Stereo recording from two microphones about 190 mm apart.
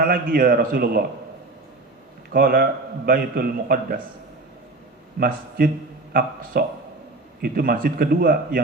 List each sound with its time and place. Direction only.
0.0 s speech: 50° right (ahead or behind)
2.3 s speech: 50° right (ahead or behind)
5.2 s speech: 50° right (ahead or behind)